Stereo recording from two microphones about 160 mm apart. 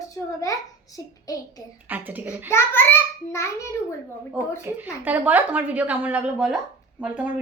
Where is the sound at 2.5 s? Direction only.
15° left (ahead or behind).